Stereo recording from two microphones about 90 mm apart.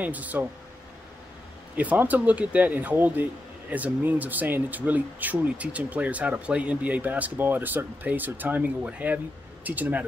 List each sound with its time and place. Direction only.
0.0 s speech: 15° right (ahead or behind)
1.8 s speech: 15° right (ahead or behind)